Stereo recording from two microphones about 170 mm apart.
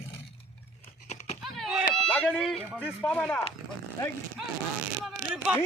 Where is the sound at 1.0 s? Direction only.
40° left (ahead or behind).